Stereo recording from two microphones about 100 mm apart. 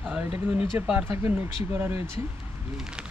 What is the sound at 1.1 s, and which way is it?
Speech, 20° right (ahead or behind).